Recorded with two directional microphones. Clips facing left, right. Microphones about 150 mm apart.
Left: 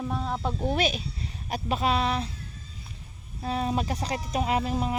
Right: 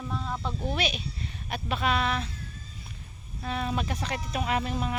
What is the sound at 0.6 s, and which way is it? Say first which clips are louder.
Speech: left 4 dB; 45° left (ahead or behind).